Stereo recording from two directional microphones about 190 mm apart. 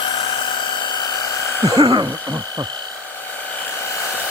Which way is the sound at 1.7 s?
25° right (ahead or behind).